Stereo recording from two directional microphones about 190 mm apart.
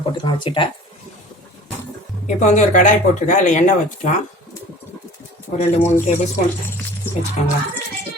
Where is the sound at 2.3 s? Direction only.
40° left (ahead or behind).